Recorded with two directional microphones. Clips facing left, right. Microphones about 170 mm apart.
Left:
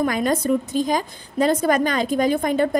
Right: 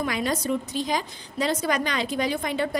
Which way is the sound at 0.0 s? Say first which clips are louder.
Left 6 dB; 50° left (ahead or behind).